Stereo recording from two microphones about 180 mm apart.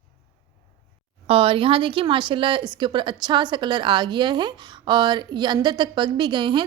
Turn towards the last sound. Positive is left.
turn(degrees=-25)  # may be behind; listen again after turning